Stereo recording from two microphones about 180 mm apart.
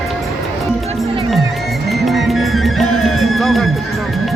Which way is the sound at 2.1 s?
Centre (ahead or behind).